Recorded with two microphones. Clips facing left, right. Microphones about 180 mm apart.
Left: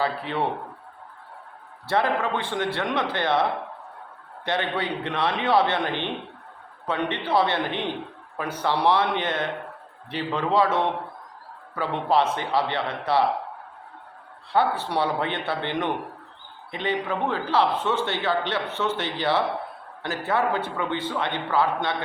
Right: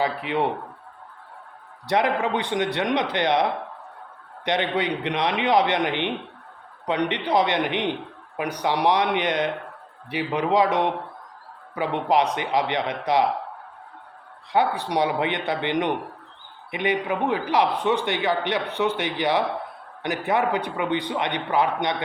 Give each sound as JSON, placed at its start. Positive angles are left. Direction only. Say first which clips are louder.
{"t": 0.0, "sound": "a man's voice", "louder": "right 2 dB", "side_deg": -15}
{"t": 1.9, "sound": "a man's voice", "louder": "right 2 dB", "side_deg": -15}
{"t": 4.4, "sound": "a man's voice", "louder": "right 3 dB", "side_deg": -20}
{"t": 14.5, "sound": "a man's voice", "louder": "right 1 dB", "side_deg": -15}